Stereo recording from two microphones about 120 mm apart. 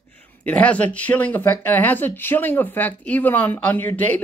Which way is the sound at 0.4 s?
10° left (ahead or behind).